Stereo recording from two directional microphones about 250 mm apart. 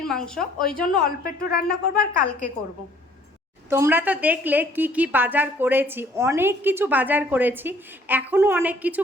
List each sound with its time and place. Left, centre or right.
0.1 s speech: centre
1.0 s speech: left
3.7 s a woman's voice: centre